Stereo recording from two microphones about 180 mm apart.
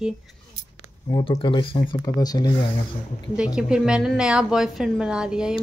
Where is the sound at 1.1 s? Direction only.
25° left (ahead or behind).